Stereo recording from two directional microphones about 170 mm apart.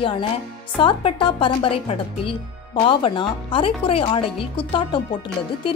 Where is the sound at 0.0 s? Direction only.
30° left (ahead or behind).